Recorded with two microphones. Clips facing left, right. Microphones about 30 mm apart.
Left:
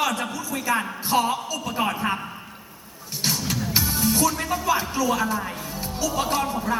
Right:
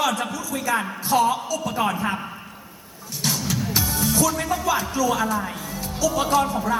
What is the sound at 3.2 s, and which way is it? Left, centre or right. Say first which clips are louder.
Music: right 1 dB; centre.